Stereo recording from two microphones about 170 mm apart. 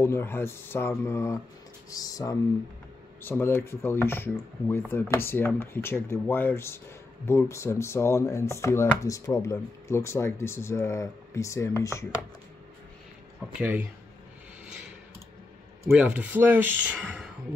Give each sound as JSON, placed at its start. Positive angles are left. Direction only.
{"t": 0.0, "sound": "speech", "side_deg": 15}
{"t": 13.6, "sound": "speech", "side_deg": -10}
{"t": 15.8, "sound": "speech", "side_deg": -10}